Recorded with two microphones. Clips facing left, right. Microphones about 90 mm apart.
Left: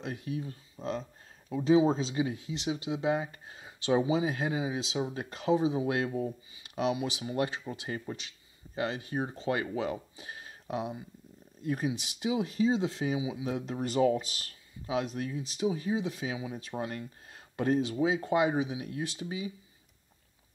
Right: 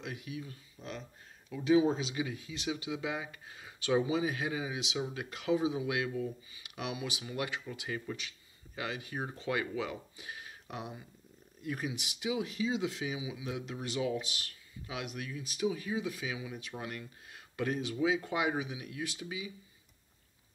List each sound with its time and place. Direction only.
0.0 s speech: 35° left (ahead or behind)